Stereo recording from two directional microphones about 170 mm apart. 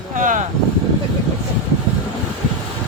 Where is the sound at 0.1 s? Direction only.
50° right (ahead or behind).